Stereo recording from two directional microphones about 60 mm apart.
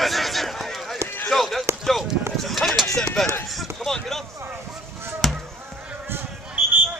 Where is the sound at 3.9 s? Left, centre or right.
Centre.